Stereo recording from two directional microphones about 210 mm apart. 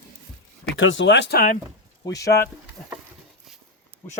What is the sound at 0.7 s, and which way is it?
Speech, 60° left (ahead or behind).